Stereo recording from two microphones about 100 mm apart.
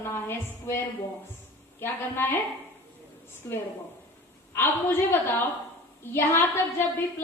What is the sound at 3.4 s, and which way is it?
A woman's voice, 25° left (ahead or behind).